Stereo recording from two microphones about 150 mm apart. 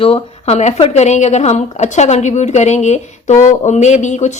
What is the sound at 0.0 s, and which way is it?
Speech, 40° left (ahead or behind).